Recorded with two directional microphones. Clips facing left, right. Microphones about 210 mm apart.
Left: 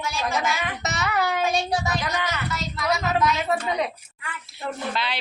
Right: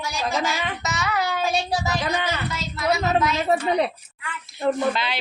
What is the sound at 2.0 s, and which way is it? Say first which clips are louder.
A woman's voice: right 3 dB; 30° right (ahead or behind).